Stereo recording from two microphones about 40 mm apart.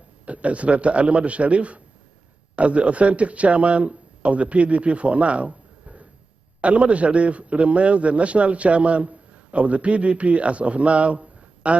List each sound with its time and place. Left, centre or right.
0.2 s a man's voice: right